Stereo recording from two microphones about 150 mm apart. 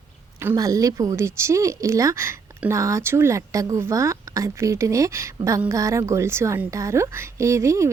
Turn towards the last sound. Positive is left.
turn(degrees=-20)  # may be behind; listen again after turning